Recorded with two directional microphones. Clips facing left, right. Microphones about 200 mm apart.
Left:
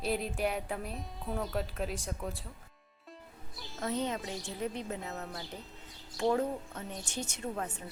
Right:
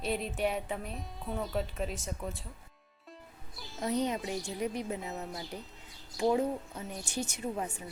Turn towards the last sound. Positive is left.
turn(degrees=-10)  # may be behind; listen again after turning